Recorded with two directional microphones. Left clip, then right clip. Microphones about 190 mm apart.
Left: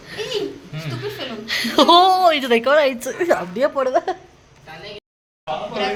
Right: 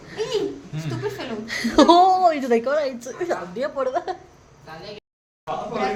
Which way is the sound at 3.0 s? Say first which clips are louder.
Left 7 dB; 35° left (ahead or behind).